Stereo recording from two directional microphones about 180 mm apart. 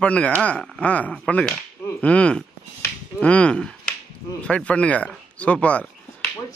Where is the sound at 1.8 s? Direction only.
5° left (ahead or behind).